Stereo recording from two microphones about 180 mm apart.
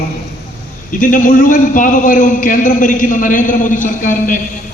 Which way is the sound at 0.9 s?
45° left (ahead or behind).